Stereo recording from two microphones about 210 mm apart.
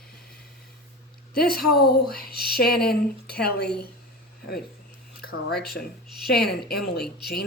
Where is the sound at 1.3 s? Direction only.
45° left (ahead or behind).